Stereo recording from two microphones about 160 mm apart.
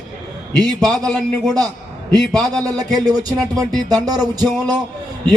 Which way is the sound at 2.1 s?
25° right (ahead or behind).